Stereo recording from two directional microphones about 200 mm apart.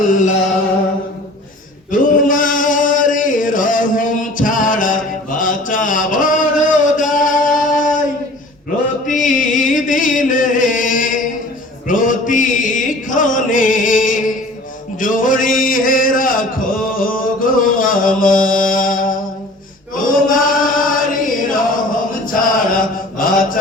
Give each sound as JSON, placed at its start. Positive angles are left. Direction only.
{"t": 0.1, "sound": "music", "side_deg": 40}
{"t": 1.9, "sound": "chant", "side_deg": 40}
{"t": 9.0, "sound": "a sound", "side_deg": 40}
{"t": 11.9, "sound": "chant", "side_deg": 40}
{"t": 14.9, "sound": "a sound", "side_deg": 40}
{"t": 20.1, "sound": "chant", "side_deg": 45}